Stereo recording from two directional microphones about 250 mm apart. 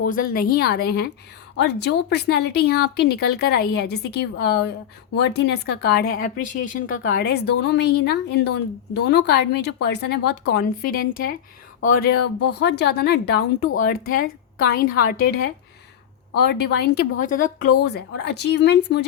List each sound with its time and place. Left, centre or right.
0.0 s a woman's voice: left
16.3 s a woman's voice: left